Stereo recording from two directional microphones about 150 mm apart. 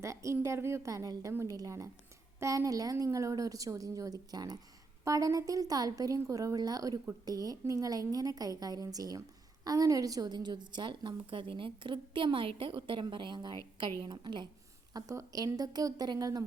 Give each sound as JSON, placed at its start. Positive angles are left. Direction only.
{"t": 0.0, "sound": "a woman's voice", "side_deg": -20}
{"t": 14.9, "sound": "a woman's voice", "side_deg": -20}